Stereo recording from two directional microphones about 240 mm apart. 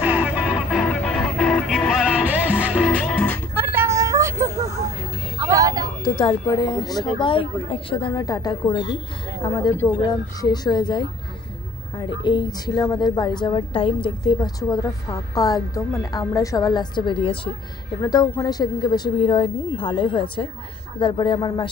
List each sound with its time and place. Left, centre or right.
0.0 s music: centre
3.5 s vehicle: centre
5.5 s a sound: centre
6.0 s a woman's voice: centre